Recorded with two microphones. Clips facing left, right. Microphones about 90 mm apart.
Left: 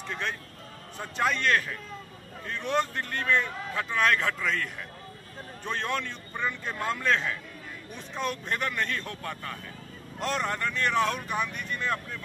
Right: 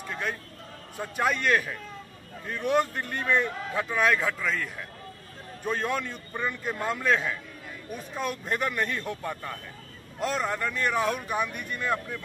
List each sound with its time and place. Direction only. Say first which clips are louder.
0.1 s speech: right 1 dB; 5° right (ahead or behind)
10.1 s speech: right 1 dB; 5° right (ahead or behind)